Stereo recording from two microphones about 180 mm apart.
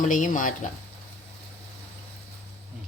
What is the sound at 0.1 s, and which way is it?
Speech, 45° left (ahead or behind).